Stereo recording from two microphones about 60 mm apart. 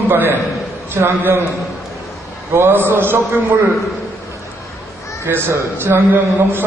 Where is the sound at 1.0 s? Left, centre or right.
Right.